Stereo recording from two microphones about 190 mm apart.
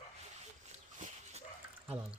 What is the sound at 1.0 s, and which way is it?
Dog, 40° right (ahead or behind).